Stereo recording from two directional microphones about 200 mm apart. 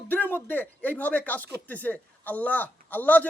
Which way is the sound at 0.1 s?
10° left (ahead or behind).